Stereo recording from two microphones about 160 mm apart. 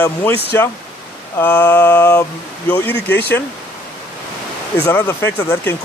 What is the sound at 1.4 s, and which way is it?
Speech, 10° left (ahead or behind).